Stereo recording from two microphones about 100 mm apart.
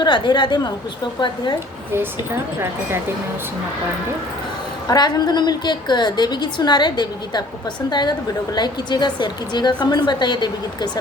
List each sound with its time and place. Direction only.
0.0 s a woman's voice: 50° left (ahead or behind)
4.9 s a woman's voice: 45° left (ahead or behind)